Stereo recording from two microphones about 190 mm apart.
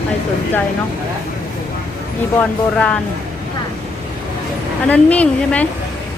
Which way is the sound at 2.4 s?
5° left (ahead or behind).